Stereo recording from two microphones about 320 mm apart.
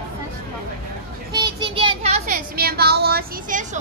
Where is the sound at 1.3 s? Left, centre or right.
Centre.